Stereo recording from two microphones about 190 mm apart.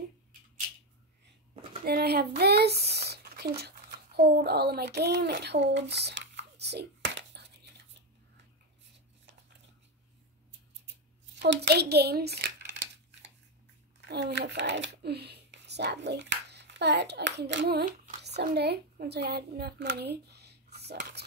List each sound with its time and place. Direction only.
1.9 s a sound: 55° right (ahead or behind)
11.3 s crumpling: 65° right (ahead or behind)
14.0 s speech: 65° right (ahead or behind)